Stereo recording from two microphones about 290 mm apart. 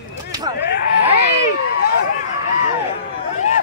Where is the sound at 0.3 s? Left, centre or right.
Centre.